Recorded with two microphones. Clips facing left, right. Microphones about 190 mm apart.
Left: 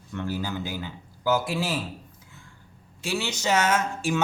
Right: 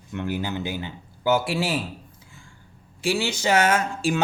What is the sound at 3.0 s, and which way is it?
Speech, 30° right (ahead or behind).